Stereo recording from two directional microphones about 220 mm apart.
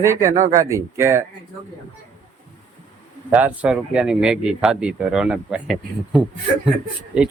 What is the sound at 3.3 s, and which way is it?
Speech, 5° right (ahead or behind).